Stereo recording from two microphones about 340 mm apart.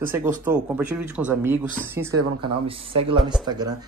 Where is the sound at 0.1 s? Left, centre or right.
Centre.